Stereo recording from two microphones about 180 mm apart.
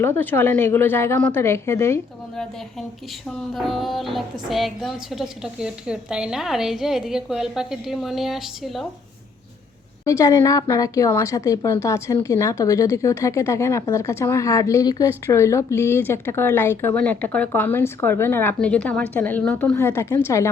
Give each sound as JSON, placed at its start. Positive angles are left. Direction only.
{"t": 0.0, "sound": "speech", "side_deg": 10}
{"t": 3.5, "sound": "a woman's voice", "side_deg": 0}
{"t": 10.0, "sound": "speech", "side_deg": 20}